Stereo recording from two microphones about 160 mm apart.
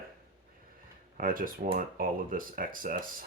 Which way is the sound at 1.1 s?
60° right (ahead or behind).